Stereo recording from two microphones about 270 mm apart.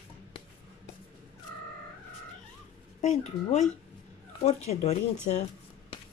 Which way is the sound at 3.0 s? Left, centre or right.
Left.